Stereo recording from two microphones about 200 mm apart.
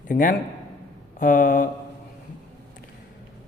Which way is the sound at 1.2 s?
40° left (ahead or behind).